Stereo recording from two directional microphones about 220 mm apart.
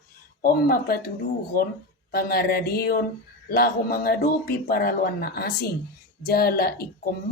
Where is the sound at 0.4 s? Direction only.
40° left (ahead or behind).